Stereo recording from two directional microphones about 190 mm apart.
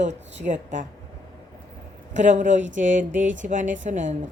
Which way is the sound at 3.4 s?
40° right (ahead or behind).